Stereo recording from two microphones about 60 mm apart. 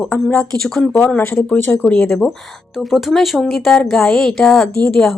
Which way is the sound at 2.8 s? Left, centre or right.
Centre.